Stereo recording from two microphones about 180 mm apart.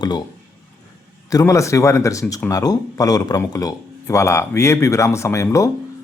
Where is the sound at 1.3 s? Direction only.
15° left (ahead or behind).